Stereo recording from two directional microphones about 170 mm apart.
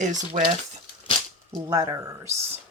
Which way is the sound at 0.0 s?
45° right (ahead or behind).